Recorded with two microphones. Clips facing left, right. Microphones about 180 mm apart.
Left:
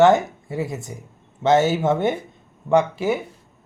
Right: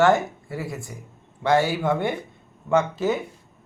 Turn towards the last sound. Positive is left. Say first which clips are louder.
# left 3 dB
turn(degrees=10)  # may be behind; listen again after turning